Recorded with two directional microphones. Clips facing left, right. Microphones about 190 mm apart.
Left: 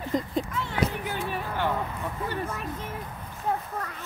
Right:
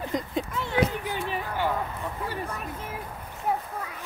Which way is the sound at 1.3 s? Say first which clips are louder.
Right 1 dB; 10° right (ahead or behind).